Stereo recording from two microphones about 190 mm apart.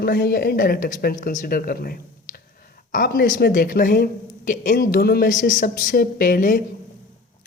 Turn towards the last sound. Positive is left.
turn(degrees=45)  # may be behind; listen again after turning